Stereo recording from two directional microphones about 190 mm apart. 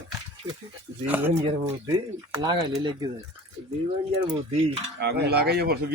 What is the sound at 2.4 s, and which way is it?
Speech, 20° right (ahead or behind).